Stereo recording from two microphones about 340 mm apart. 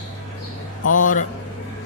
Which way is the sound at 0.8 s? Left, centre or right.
Left.